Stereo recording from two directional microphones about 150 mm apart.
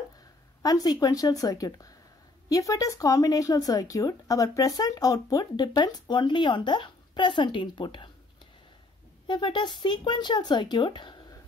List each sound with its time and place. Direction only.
0.6 s speech: 25° left (ahead or behind)
9.3 s speech: 30° left (ahead or behind)